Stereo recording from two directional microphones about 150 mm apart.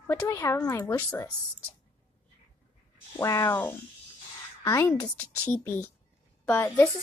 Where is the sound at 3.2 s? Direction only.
20° left (ahead or behind).